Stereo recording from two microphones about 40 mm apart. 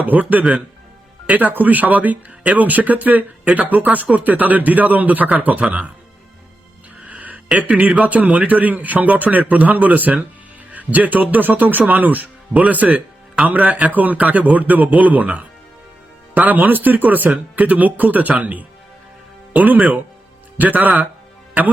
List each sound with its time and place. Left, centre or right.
0.0 s speech: right
7.0 s a sound: right
7.7 s speech: right
16.5 s speech: right